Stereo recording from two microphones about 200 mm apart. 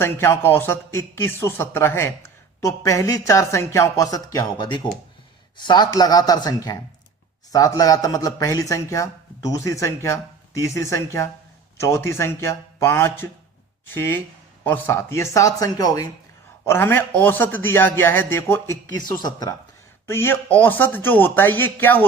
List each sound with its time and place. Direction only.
0.0 s a man's voice: 10° left (ahead or behind)